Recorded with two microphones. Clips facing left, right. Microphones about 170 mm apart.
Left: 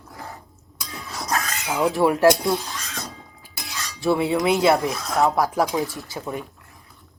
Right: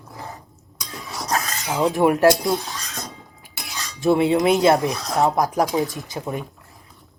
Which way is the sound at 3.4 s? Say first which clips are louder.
Right 1 dB; 20° right (ahead or behind).